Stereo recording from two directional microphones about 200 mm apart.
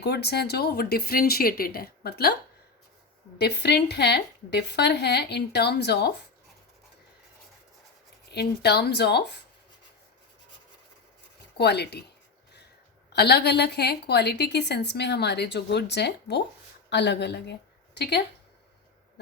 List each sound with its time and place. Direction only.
0.0 s speech: 55° left (ahead or behind)
3.3 s a woman's voice: 55° left (ahead or behind)
8.3 s a woman's voice: 55° left (ahead or behind)
11.5 s a woman's voice: 55° left (ahead or behind)
13.1 s a woman's voice: 55° left (ahead or behind)